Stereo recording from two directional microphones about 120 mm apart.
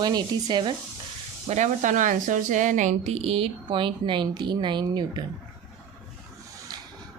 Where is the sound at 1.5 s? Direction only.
90° right; by 5.2 s 35° right (ahead or behind).